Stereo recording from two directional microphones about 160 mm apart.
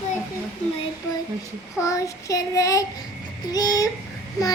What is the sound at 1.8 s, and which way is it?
Child singing, 20° left (ahead or behind).